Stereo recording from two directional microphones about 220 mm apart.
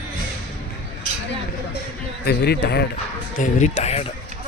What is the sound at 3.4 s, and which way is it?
Speech, 35° left (ahead or behind).